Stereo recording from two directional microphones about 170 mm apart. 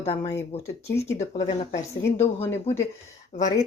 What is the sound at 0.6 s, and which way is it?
Speech, 15° left (ahead or behind).